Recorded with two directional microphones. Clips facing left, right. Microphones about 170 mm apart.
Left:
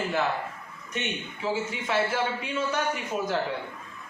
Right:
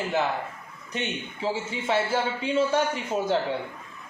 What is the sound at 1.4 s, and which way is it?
A man's voice, 30° right (ahead or behind).